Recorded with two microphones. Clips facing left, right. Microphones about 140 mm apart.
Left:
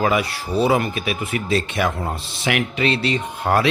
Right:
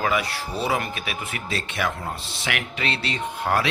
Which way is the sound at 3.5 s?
35° left (ahead or behind).